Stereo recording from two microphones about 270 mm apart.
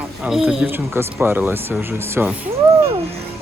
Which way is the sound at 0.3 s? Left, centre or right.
Centre.